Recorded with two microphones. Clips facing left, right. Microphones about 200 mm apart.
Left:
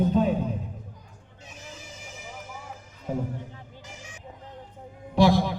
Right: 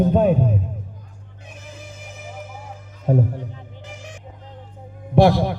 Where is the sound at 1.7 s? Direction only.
55° right (ahead or behind).